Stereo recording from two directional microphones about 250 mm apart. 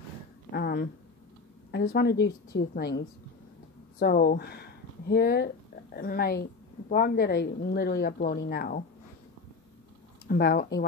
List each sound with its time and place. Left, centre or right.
0.5 s a sound: left
1.7 s speech: left
10.2 s speech: left